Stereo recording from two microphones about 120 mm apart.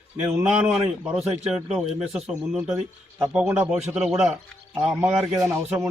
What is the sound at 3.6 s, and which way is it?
Speech, 5° right (ahead or behind).